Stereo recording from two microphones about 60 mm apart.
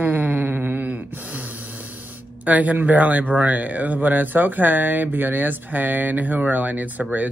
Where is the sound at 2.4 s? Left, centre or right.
Right.